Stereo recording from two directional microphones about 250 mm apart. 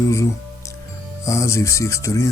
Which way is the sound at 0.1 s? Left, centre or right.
Centre.